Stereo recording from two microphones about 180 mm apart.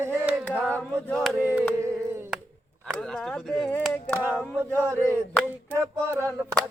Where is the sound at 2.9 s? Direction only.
5° left (ahead or behind).